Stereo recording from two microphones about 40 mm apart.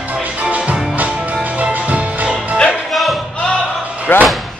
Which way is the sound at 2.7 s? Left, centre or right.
Centre.